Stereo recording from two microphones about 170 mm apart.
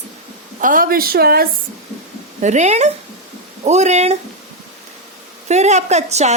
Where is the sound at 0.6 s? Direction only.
55° right (ahead or behind).